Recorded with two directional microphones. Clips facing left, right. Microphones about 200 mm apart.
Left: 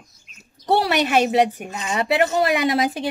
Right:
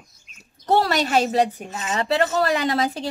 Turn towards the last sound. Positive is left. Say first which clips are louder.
# left 2 dB
turn(degrees=15)  # may be behind; listen again after turning